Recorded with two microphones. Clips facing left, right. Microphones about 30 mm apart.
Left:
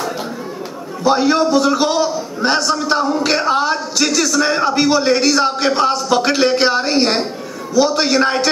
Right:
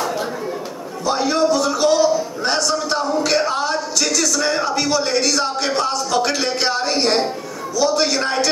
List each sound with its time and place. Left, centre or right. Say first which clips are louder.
1.0 s a man's voice: left 4 dB; left